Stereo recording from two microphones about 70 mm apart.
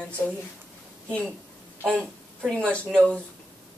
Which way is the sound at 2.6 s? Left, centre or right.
Centre.